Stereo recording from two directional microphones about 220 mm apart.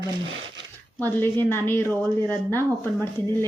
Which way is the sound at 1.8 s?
15° right (ahead or behind).